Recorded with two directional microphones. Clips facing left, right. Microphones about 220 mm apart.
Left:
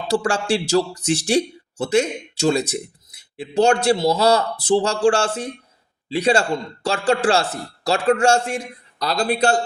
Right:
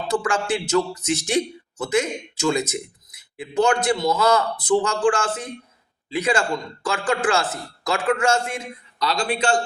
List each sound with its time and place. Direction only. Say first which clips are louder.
0.1 s a man's voice: left 3 dB; 30° left (ahead or behind)